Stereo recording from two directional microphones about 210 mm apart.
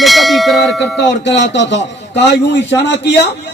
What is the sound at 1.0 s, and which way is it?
Speech, 55° left (ahead or behind).